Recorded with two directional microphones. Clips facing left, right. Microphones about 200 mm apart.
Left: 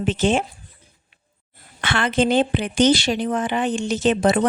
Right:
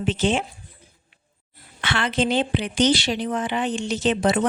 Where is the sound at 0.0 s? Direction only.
50° left (ahead or behind).